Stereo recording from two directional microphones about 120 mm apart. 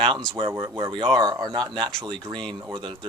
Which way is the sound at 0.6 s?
40° right (ahead or behind).